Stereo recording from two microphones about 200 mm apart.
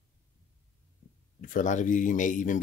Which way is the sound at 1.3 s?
40° left (ahead or behind).